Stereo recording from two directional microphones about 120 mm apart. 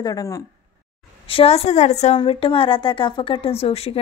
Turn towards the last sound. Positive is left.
turn(degrees=55)  # may be behind; listen again after turning